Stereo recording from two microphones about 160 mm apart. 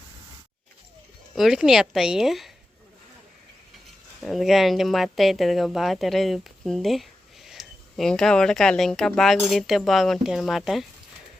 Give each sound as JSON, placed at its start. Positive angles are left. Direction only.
{"t": 1.4, "sound": "speech", "side_deg": -5}
{"t": 4.2, "sound": "speech", "side_deg": 0}